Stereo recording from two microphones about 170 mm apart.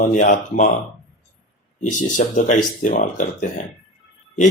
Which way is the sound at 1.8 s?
45° left (ahead or behind).